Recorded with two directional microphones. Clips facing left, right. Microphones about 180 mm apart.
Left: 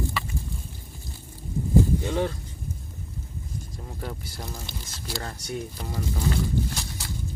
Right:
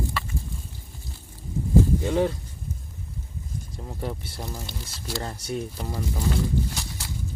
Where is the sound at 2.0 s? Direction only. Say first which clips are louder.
Right 3 dB; 5° right (ahead or behind).